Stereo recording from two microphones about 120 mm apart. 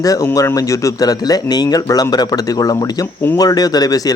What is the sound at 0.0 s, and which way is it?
Speech, 30° left (ahead or behind).